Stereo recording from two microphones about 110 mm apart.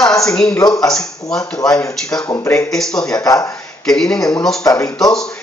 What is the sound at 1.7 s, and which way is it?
Speech, 30° left (ahead or behind).